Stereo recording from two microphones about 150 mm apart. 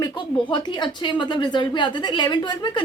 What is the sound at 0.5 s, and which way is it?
Speech, 30° left (ahead or behind).